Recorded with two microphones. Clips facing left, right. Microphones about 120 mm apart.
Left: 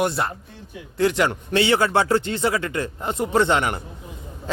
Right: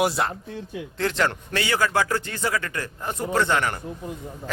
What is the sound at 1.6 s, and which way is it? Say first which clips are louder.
A man's voice: left 4 dB; 25° left (ahead or behind).